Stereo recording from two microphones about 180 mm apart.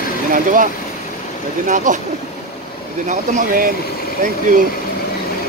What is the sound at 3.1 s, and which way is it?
Speech, 50° right (ahead or behind).